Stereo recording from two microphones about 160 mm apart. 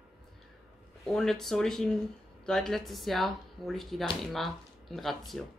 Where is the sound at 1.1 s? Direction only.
Centre (ahead or behind).